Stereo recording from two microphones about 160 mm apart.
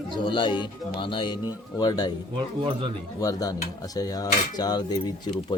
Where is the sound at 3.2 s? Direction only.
20° left (ahead or behind).